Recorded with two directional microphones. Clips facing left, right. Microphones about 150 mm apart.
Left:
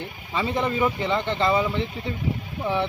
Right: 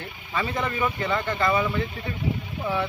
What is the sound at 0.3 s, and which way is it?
A man's voice, 20° left (ahead or behind).